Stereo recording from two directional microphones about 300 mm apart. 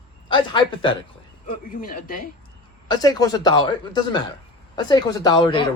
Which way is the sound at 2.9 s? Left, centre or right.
Centre.